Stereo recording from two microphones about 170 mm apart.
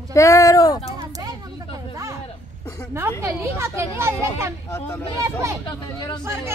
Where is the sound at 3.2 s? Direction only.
15° right (ahead or behind).